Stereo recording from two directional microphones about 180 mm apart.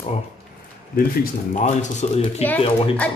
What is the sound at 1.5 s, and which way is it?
Speech, 40° left (ahead or behind).